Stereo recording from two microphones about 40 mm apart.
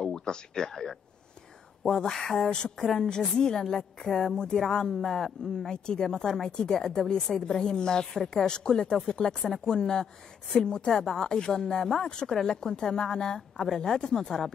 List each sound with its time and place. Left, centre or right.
0.0 s speech: centre
2.3 s a woman's voice: centre
4.4 s a woman's voice: centre
5.0 s speech: centre
5.7 s a woman's voice: centre